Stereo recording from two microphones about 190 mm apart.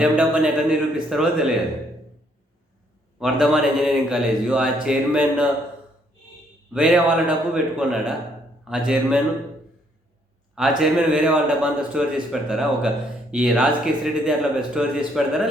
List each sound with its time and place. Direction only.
0.0 s speech: 5° right (ahead or behind)
3.2 s speech: centre (ahead or behind)
6.7 s speech: 5° right (ahead or behind)
10.5 s speech: 5° right (ahead or behind)